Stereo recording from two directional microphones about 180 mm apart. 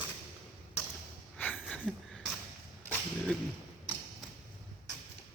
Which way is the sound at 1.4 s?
10° left (ahead or behind).